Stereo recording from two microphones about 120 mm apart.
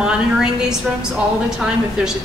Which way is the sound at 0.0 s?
5° right (ahead or behind).